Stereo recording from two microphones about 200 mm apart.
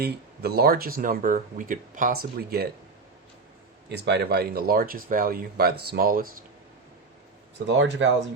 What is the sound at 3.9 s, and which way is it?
Speech, 55° right (ahead or behind).